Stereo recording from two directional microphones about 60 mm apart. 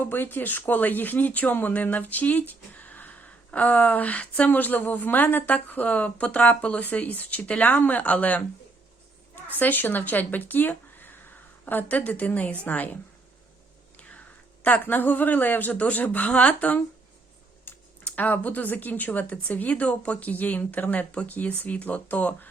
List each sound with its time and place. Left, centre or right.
0.0 s speech: left
14.6 s speech: left
17.7 s typing: left
18.0 s speech: left